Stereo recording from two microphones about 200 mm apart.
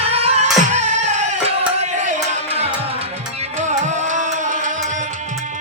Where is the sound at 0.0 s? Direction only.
30° right (ahead or behind).